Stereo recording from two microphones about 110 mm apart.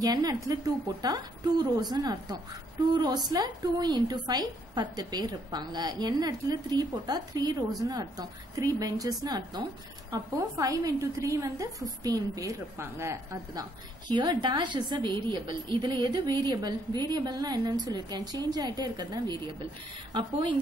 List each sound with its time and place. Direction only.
0.0 s a woman's voice: 35° right (ahead or behind)
1.8 s a woman's voice: 40° right (ahead or behind)
14.1 s a woman's voice: 45° right (ahead or behind)
20.1 s speech: 50° right (ahead or behind)